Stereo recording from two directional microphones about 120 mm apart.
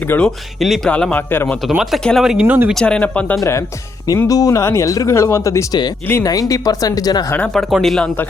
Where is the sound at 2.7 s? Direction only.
10° left (ahead or behind).